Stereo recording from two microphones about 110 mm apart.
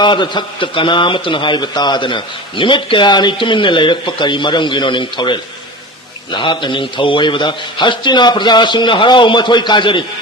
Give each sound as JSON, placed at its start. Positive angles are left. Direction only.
{"t": 0.0, "sound": "a man's voice", "side_deg": 45}